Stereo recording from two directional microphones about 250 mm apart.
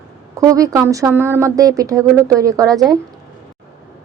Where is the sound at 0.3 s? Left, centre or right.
Centre.